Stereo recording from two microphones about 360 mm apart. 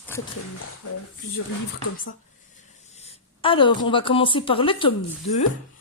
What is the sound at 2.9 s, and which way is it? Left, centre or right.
A woman's voice, centre.